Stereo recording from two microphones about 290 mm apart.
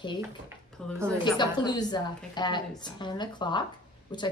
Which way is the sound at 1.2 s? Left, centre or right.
Centre.